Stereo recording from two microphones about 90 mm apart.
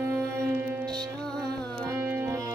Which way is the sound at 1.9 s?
20° right (ahead or behind).